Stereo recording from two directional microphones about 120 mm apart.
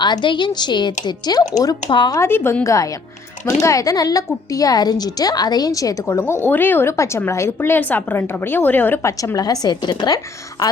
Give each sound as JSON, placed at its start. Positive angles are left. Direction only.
{"t": 0.0, "sound": "a woman's voice", "side_deg": 40}
{"t": 2.1, "sound": "a woman's voice", "side_deg": 20}